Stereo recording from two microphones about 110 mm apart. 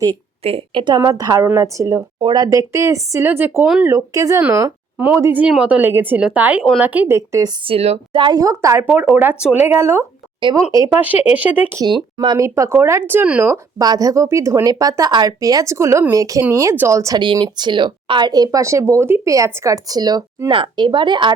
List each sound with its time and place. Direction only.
0.4 s speech: 60° right (ahead or behind)
0.9 s a woman's voice: 30° right (ahead or behind)
4.9 s speech: 15° right (ahead or behind)
7.2 s a woman's voice: 30° right (ahead or behind)
7.6 s speech: 60° right (ahead or behind)
8.1 s a woman's voice: 45° right (ahead or behind)
8.4 s a woman's voice: 30° right (ahead or behind)
9.2 s speech: 10° right (ahead or behind)
9.6 s a woman's voice: 25° right (ahead or behind)
10.8 s speech: 15° right (ahead or behind)
12.4 s a woman's voice: 25° right (ahead or behind)
13.4 s a woman's voice: 30° right (ahead or behind)
17.2 s speech: 45° right (ahead or behind)
20.5 s speech: 50° right (ahead or behind)